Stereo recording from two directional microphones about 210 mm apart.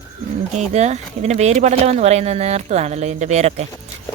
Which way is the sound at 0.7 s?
30° right (ahead or behind).